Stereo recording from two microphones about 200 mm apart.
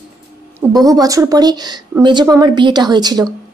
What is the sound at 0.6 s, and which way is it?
A woman's voice, 20° right (ahead or behind).